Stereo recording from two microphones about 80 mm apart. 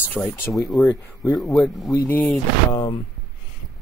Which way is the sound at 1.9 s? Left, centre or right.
Left.